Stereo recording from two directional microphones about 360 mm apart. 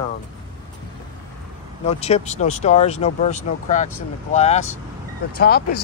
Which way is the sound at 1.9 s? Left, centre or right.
Centre.